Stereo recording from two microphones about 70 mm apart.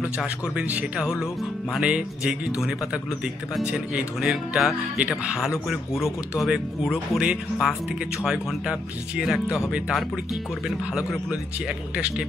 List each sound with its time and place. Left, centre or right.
0.6 s speech: centre
1.0 s speech: centre
1.8 s speech: centre
3.6 s speech: centre
11.9 s speech: centre